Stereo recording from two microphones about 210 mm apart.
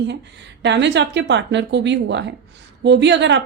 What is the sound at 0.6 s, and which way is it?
A woman's voice, 55° right (ahead or behind).